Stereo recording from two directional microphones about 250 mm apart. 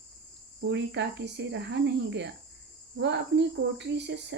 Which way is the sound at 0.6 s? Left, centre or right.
Right.